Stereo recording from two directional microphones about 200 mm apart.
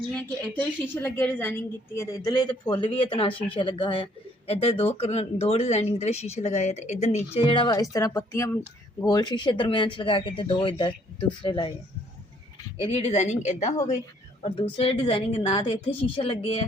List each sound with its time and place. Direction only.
1.0 s a woman's voice: 10° left (ahead or behind)
12.8 s a woman's voice: 30° left (ahead or behind)